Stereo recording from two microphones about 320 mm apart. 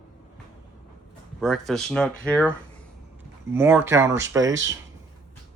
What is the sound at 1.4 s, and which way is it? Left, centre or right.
Speech, centre.